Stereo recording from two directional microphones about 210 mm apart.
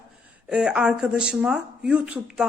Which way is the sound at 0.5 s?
5° right (ahead or behind).